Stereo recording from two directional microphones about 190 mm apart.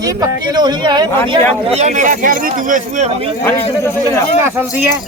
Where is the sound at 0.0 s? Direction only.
20° right (ahead or behind).